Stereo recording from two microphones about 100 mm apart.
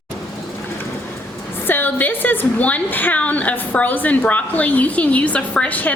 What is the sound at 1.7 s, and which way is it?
A woman's voice, 20° left (ahead or behind).